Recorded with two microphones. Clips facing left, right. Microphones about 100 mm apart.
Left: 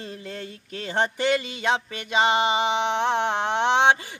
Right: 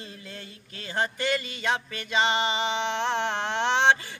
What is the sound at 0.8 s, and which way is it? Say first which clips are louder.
Music: left 4 dB; 25° left (ahead or behind).